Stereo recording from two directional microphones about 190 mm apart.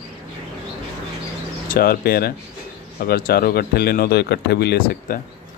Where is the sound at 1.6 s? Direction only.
50° left (ahead or behind).